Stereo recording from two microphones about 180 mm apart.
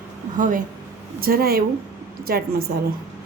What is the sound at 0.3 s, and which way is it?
A woman's voice, 45° right (ahead or behind).